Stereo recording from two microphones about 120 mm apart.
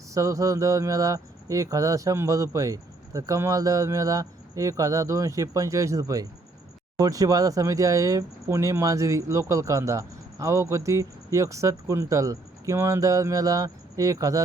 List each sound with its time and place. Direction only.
0.1 s speech: 25° right (ahead or behind)